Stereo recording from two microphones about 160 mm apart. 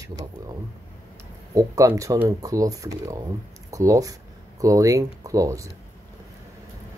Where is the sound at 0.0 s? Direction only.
20° right (ahead or behind).